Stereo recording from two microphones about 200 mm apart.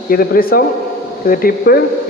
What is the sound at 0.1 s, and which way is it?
A man's voice, 45° left (ahead or behind).